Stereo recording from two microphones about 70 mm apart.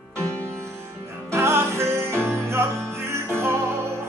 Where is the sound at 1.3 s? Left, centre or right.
Right.